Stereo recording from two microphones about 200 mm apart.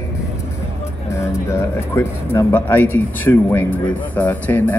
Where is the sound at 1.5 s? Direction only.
15° left (ahead or behind).